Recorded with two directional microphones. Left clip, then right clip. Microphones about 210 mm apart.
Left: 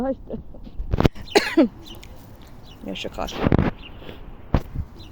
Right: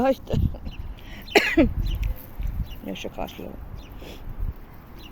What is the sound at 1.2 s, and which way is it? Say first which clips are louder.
Cough: right 1 dB; 10° left (ahead or behind).